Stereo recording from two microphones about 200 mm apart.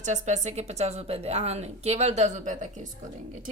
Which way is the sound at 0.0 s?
35° right (ahead or behind).